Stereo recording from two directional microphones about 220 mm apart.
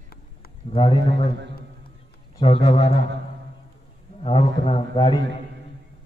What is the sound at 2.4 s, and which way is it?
Speech, 25° left (ahead or behind).